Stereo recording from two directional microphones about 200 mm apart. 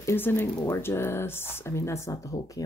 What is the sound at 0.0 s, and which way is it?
Speech, 10° left (ahead or behind).